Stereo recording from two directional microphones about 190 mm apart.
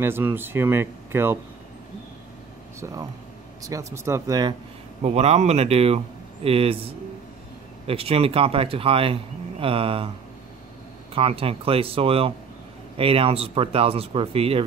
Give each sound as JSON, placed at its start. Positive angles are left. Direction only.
{"t": 0.0, "sound": "speech", "side_deg": -10}
{"t": 2.8, "sound": "speech", "side_deg": -15}
{"t": 5.0, "sound": "speech", "side_deg": -35}
{"t": 11.1, "sound": "speech", "side_deg": -30}